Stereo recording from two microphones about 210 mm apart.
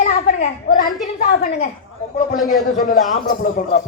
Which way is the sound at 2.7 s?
40° left (ahead or behind).